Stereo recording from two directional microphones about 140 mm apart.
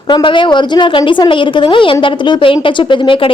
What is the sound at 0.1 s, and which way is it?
A woman's voice, 35° left (ahead or behind).